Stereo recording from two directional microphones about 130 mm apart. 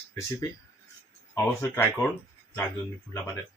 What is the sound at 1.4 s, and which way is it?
Speech, 20° left (ahead or behind).